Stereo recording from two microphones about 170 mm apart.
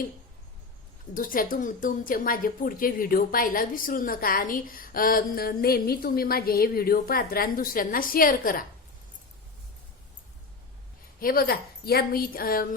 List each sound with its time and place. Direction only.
1.1 s a woman's voice: 55° left (ahead or behind)
11.2 s a woman's voice: 60° left (ahead or behind)